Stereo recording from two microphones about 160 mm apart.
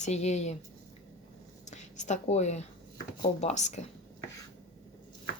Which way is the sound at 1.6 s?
50° left (ahead or behind).